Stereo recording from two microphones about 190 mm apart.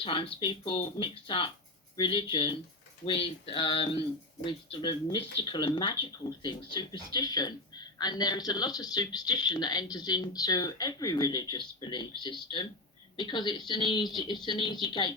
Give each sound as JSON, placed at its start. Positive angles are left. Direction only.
{"t": 0.0, "sound": "speech", "side_deg": 25}